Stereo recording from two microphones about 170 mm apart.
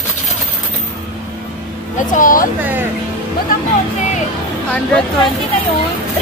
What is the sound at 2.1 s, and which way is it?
Speech, 55° left (ahead or behind).